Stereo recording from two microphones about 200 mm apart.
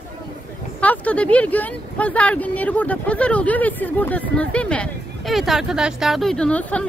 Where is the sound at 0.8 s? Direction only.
5° left (ahead or behind).